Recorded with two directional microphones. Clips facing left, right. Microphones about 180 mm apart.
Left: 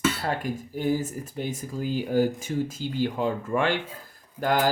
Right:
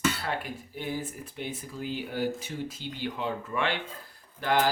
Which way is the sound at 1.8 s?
40° left (ahead or behind).